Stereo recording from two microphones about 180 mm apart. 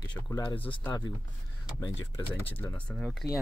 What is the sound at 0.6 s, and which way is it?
Speech, 10° left (ahead or behind).